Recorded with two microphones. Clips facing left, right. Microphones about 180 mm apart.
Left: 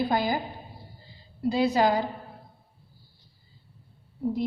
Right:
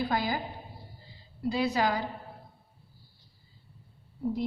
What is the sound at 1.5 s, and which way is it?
Speech, 30° left (ahead or behind).